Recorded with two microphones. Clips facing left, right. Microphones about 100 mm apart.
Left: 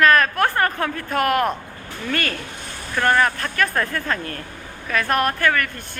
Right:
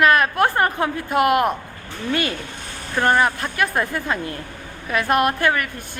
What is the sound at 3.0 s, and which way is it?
A woman's voice, 20° right (ahead or behind).